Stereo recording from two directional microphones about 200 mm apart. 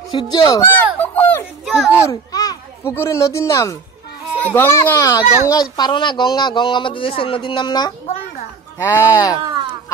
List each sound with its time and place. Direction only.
0.3 s speech: 20° left (ahead or behind)
1.0 s children playing: 10° left (ahead or behind)
2.0 s speech: 15° left (ahead or behind)